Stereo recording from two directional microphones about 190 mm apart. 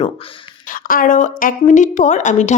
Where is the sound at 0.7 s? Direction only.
45° left (ahead or behind).